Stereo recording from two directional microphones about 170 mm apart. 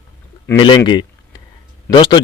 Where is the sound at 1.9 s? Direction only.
25° left (ahead or behind).